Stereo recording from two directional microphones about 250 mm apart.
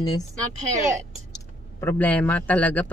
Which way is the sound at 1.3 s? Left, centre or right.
Centre.